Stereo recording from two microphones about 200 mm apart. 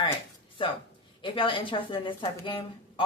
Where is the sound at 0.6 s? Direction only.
25° left (ahead or behind).